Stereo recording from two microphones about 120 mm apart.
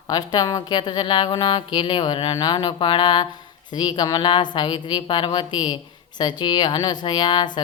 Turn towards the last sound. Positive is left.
turn(degrees=35)  # may be behind; listen again after turning